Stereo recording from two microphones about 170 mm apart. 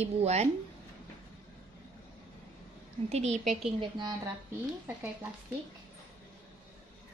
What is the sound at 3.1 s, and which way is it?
Speech, 40° right (ahead or behind).